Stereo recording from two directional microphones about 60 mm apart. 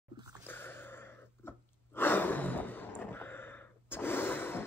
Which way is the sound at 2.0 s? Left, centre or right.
Left.